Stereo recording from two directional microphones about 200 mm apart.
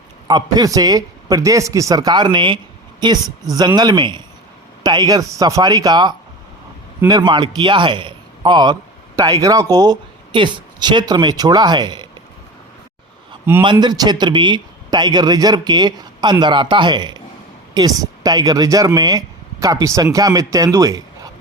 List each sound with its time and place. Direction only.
0.3 s a man's voice: 20° right (ahead or behind)
13.6 s a man's voice: 25° right (ahead or behind)